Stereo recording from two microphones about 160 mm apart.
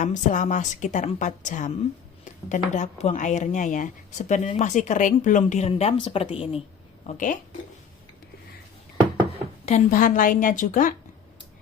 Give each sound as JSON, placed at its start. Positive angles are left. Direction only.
{"t": 0.0, "sound": "speech", "side_deg": 50}
{"t": 7.1, "sound": "speech", "side_deg": 55}
{"t": 9.6, "sound": "speech", "side_deg": 50}